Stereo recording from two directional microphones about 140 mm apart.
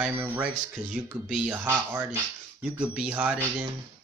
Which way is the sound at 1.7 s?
20° right (ahead or behind).